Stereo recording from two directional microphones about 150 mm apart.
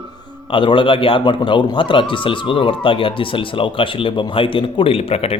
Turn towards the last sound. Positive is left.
turn(degrees=40)  # may be behind; listen again after turning